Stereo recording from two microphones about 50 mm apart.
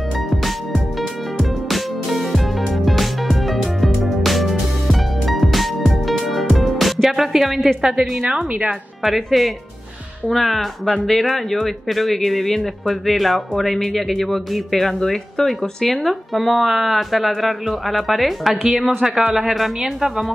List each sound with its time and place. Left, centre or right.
0.3 s music: centre
7.1 s a woman's voice: centre
8.2 s a woman's voice: right
9.0 s a man's voice: centre